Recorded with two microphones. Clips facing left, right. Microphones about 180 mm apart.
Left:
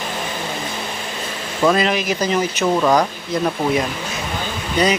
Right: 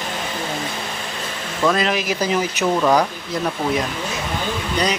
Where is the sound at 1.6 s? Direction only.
Centre (ahead or behind).